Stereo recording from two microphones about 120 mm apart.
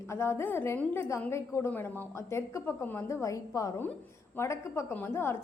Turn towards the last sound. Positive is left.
turn(degrees=20)  # may be behind; listen again after turning